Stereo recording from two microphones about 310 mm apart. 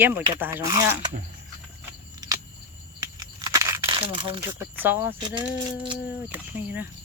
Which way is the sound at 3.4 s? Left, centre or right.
Centre.